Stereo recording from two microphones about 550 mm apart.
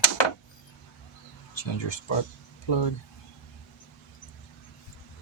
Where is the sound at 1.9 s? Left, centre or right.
Left.